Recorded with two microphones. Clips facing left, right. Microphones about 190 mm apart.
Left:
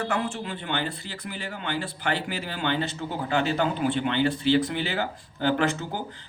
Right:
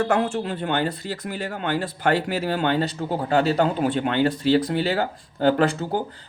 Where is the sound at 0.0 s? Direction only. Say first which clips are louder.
Right 7 dB; 40° right (ahead or behind).